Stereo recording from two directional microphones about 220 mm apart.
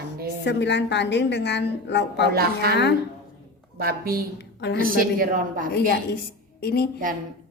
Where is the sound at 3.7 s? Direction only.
40° right (ahead or behind).